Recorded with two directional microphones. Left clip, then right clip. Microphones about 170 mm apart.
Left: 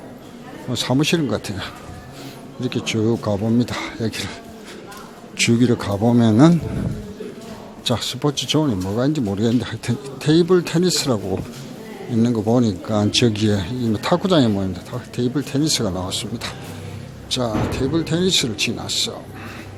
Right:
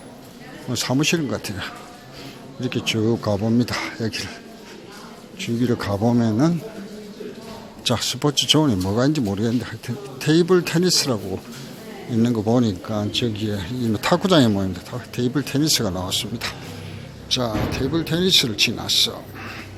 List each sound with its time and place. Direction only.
0.7 s speech: centre (ahead or behind)
5.6 s speech: centre (ahead or behind)
7.9 s speech: centre (ahead or behind)
13.0 s speech: 20° left (ahead or behind)
13.6 s speech: centre (ahead or behind)